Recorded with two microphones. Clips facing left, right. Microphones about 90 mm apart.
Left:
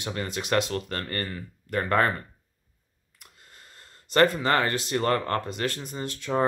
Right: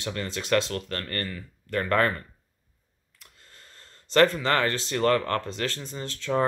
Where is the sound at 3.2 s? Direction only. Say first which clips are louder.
Left 1 dB; 15° left (ahead or behind).